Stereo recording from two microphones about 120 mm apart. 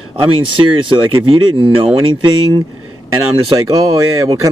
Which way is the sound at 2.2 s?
35° right (ahead or behind).